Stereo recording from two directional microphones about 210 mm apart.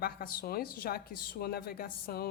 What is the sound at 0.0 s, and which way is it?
Speech, 45° left (ahead or behind).